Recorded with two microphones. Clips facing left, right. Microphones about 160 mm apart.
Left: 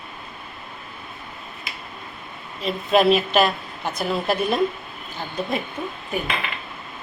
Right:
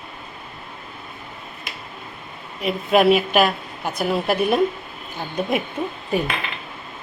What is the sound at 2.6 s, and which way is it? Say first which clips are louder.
A woman's voice: right 1 dB; 10° right (ahead or behind).